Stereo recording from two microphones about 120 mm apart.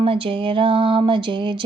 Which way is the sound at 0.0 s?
50° right (ahead or behind).